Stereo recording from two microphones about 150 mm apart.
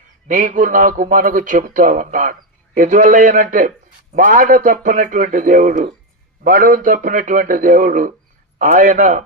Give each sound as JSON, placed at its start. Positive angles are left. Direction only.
{"t": 0.3, "sound": "a man's voice", "side_deg": -55}